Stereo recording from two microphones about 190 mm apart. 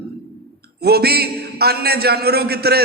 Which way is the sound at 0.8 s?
55° right (ahead or behind).